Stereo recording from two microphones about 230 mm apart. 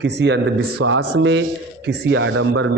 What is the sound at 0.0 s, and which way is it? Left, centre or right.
A man's voice, right.